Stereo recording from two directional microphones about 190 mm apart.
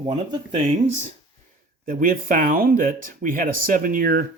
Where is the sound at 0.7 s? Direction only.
40° right (ahead or behind).